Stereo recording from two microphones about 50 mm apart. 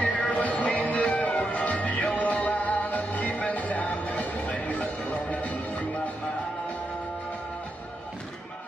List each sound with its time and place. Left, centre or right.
0.0 s music: left